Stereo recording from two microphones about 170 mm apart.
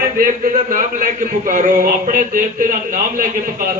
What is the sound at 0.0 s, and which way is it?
A man's voice, 55° right (ahead or behind).